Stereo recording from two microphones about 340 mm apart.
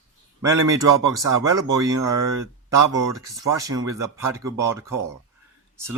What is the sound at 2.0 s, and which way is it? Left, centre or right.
Speech, right.